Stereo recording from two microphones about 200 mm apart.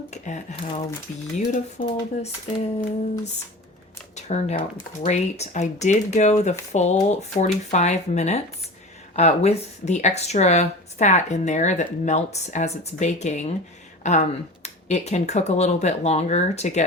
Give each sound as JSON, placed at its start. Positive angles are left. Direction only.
{"t": 0.1, "sound": "speech", "side_deg": 35}
{"t": 4.1, "sound": "speech", "side_deg": 35}